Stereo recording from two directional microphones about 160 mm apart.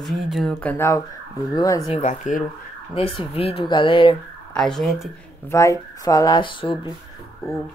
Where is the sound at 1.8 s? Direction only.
45° left (ahead or behind).